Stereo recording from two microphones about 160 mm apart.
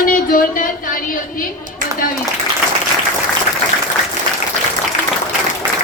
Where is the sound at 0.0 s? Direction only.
60° left (ahead or behind).